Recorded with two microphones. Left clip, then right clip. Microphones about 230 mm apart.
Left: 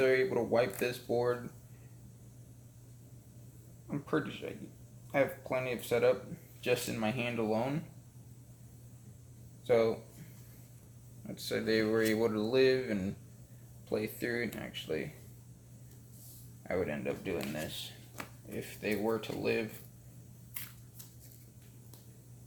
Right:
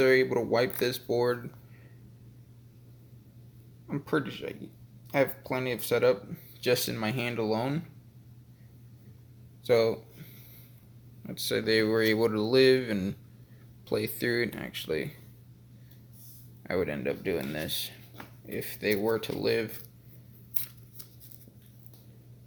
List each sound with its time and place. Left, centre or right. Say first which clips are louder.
0.0 s speech: right 5 dB; right
3.8 s speech: right 4 dB; right
9.6 s speech: right 4 dB; right
11.3 s speech: right 5 dB; right
16.6 s speech: right 5 dB; right